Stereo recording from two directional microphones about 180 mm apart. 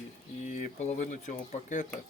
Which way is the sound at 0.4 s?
45° left (ahead or behind).